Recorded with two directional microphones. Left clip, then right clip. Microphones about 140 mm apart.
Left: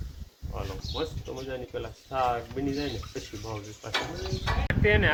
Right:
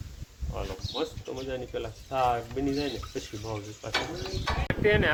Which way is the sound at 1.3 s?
30° right (ahead or behind).